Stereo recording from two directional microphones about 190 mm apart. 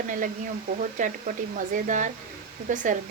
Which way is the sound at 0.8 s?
40° right (ahead or behind).